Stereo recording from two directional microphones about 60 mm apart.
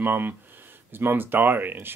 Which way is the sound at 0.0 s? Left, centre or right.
Right.